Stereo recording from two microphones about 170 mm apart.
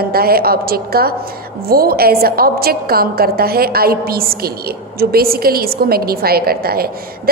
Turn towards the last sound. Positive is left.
turn(degrees=-65)  # may be behind; listen again after turning